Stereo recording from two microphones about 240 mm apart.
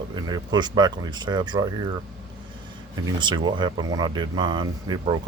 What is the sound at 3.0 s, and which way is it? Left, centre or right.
Speech, centre.